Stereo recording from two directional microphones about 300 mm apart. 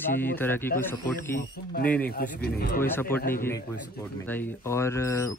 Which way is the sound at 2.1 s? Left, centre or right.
Left.